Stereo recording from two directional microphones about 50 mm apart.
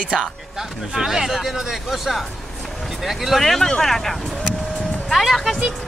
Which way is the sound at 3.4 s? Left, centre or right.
Centre.